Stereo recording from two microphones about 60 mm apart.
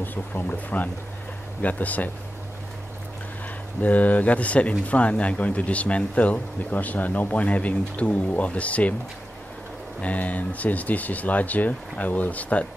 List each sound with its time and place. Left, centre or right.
0.0 s speech: left
3.8 s speech: left
10.0 s speech: left